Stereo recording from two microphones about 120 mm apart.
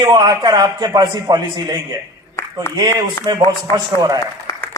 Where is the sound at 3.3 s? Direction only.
30° right (ahead or behind).